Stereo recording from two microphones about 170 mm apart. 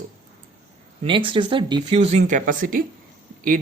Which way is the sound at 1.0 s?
30° right (ahead or behind).